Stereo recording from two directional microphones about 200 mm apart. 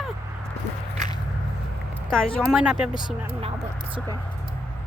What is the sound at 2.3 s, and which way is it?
Speech, 5° right (ahead or behind).